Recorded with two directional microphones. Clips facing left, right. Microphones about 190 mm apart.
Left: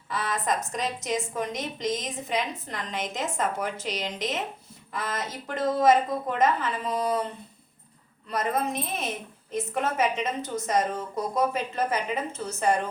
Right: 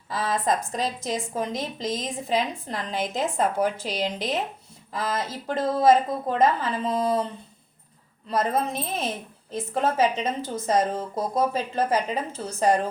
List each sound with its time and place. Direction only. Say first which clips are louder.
0.1 s a woman's voice: right 3 dB; 30° right (ahead or behind)
5.8 s a woman's voice: right 2 dB; 35° right (ahead or behind)
8.3 s a woman's voice: right 3 dB; 30° right (ahead or behind)